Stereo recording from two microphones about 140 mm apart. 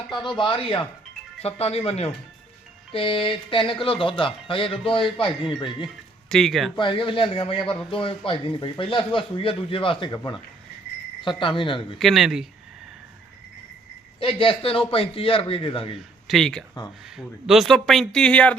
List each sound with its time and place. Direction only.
0.2 s a man's voice: 35° left (ahead or behind)
5.6 s speech: centre (ahead or behind)
6.7 s a man's voice: 35° left (ahead or behind)
11.2 s a man's voice: 35° left (ahead or behind)
11.9 s speech: centre (ahead or behind)
14.2 s a man's voice: 40° left (ahead or behind)
16.2 s speech: centre (ahead or behind)